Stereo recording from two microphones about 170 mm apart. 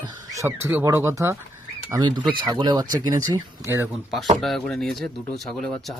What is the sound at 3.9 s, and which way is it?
Speech, centre (ahead or behind).